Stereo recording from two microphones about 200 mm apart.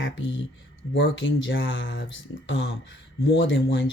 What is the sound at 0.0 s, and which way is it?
Speech, 65° left (ahead or behind).